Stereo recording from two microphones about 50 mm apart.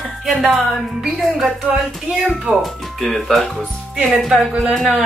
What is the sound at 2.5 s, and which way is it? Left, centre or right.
Speech, centre.